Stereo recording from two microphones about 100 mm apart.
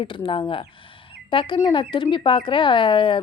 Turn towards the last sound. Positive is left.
turn(degrees=60)  # may be behind; listen again after turning